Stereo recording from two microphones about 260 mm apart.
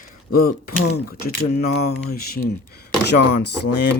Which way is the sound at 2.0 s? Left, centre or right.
Left.